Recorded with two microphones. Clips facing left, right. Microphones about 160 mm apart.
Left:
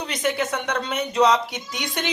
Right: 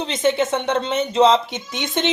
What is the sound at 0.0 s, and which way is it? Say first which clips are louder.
Speech: right 5 dB; 25° right (ahead or behind).